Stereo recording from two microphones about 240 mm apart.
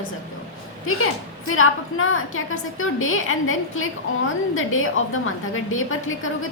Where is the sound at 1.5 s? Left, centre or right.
Left.